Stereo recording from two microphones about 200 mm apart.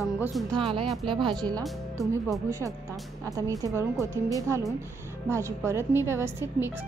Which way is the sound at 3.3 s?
15° right (ahead or behind).